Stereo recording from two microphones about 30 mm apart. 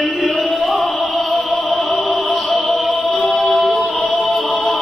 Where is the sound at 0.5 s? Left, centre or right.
Centre.